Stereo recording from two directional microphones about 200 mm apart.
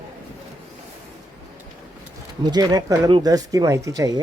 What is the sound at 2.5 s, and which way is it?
Speech, 20° right (ahead or behind).